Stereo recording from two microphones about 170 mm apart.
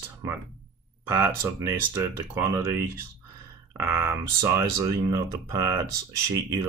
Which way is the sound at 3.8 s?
15° right (ahead or behind).